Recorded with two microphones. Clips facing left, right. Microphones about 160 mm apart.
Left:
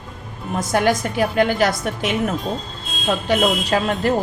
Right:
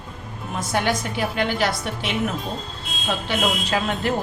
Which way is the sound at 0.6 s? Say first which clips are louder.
Left 5 dB; 45° left (ahead or behind).